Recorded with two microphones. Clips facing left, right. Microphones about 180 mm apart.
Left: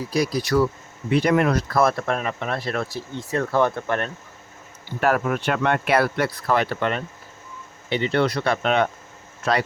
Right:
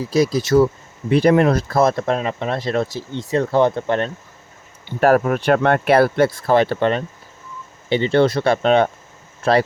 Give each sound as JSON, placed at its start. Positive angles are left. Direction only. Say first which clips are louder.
{"t": 0.1, "sound": "speech", "louder": "right 6 dB", "side_deg": -25}
{"t": 4.9, "sound": "speech", "louder": "right 6 dB", "side_deg": -40}